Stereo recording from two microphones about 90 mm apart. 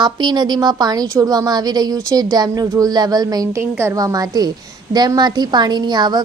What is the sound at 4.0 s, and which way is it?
A woman's voice, 45° right (ahead or behind).